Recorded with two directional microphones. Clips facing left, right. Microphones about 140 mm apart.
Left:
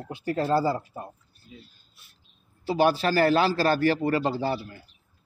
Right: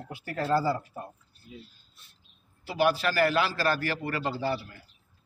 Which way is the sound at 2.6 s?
30° left (ahead or behind).